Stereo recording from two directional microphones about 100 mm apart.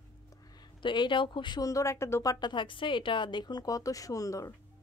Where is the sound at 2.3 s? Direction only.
50° left (ahead or behind).